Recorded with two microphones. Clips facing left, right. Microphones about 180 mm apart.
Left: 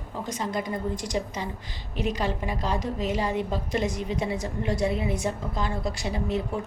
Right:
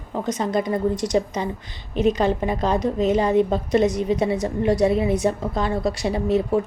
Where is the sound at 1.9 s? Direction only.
20° right (ahead or behind).